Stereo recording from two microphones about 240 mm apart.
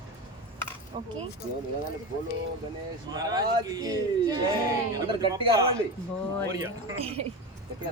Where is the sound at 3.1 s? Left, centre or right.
Centre.